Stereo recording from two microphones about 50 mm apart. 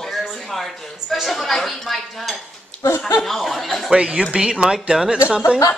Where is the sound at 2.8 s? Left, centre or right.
Left.